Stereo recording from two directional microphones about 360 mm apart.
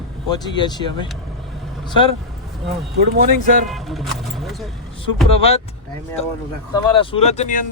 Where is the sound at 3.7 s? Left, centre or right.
Centre.